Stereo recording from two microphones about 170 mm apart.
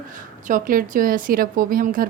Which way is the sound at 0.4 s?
50° right (ahead or behind).